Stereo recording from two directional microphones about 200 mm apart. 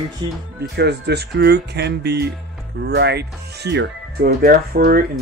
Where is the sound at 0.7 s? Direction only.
55° right (ahead or behind).